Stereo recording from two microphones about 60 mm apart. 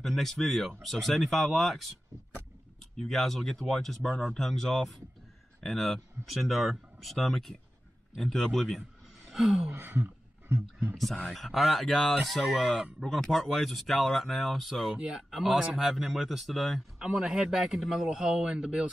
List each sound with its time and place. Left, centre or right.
0.0 s speech: centre
3.1 s speech: centre
9.3 s a sound: centre
9.7 s speech: right
11.3 s speech: centre
15.0 s speech: centre
15.3 s speech: centre
17.0 s speech: centre